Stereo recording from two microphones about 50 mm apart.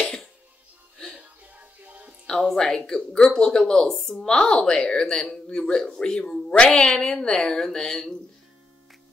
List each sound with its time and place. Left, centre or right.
1.4 s music: right
2.5 s a woman's voice: centre
2.8 s speech: centre
3.2 s a woman's voice: centre